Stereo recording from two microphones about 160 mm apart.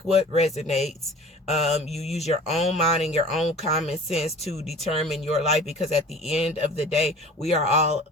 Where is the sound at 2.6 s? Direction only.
40° left (ahead or behind).